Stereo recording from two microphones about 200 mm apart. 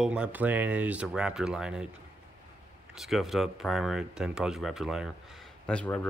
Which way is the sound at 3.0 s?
Centre (ahead or behind).